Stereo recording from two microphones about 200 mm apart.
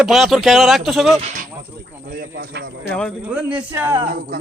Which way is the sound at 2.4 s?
55° right (ahead or behind).